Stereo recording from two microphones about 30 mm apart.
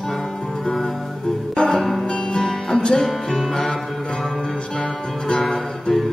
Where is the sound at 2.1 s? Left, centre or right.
Left.